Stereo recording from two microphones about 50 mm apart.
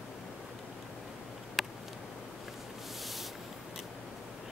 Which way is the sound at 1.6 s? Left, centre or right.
Centre.